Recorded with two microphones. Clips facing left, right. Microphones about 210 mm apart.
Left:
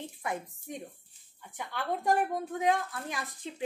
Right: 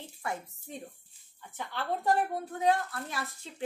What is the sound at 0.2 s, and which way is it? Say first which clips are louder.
Speech: even; 20° left (ahead or behind).